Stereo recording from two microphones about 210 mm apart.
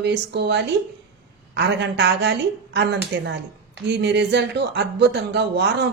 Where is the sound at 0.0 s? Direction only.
55° right (ahead or behind).